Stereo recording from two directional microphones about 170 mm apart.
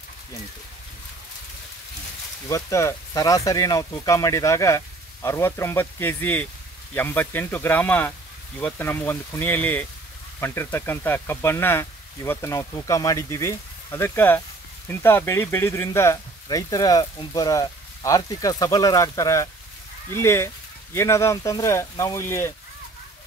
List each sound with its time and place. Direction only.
2.4 s speech: 20° left (ahead or behind)